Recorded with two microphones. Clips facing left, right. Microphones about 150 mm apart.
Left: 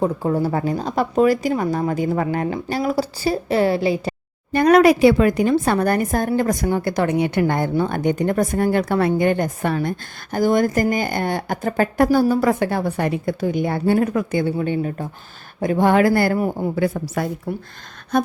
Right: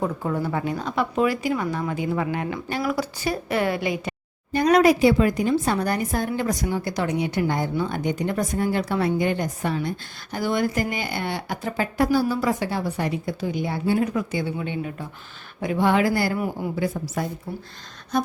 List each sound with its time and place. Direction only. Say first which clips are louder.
0.0 s speech: left 6 dB; 30° left (ahead or behind)
4.5 s a woman's voice: left 4 dB; 60° left (ahead or behind)
10.3 s a woman's voice: left 6 dB; 45° left (ahead or behind); by 17.2 s 60° left (ahead or behind)
17.5 s speech: left 6 dB; 85° left
18.1 s a sound: left 5 dB; 60° left (ahead or behind)